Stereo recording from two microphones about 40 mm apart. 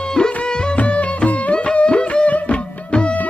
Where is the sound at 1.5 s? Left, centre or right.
Left.